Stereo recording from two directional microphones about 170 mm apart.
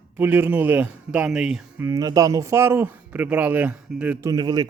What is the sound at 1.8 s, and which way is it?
Speech, 20° right (ahead or behind).